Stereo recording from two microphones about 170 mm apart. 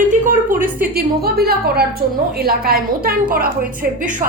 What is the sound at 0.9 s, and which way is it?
A woman's voice, 65° right (ahead or behind).